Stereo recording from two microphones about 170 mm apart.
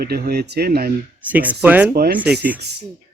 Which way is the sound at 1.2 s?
10° right (ahead or behind).